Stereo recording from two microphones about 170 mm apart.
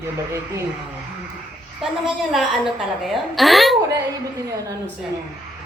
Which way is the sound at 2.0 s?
Centre (ahead or behind).